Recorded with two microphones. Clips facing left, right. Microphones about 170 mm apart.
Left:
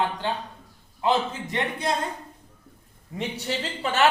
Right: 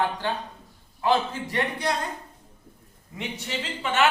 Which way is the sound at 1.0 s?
20° left (ahead or behind).